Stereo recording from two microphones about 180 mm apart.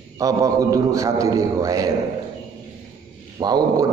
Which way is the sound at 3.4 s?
20° right (ahead or behind).